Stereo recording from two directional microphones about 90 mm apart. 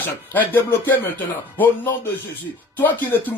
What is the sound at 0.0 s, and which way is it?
Speech, 20° left (ahead or behind).